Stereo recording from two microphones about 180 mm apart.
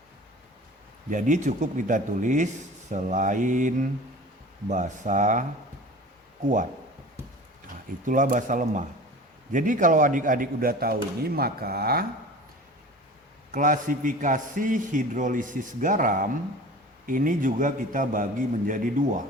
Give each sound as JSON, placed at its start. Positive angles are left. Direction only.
{"t": 1.1, "sound": "a man's voice", "side_deg": -40}
{"t": 8.0, "sound": "a man's voice", "side_deg": -45}
{"t": 13.5, "sound": "a man's voice", "side_deg": -50}